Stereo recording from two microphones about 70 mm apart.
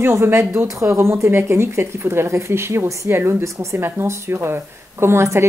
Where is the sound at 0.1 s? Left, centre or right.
Right.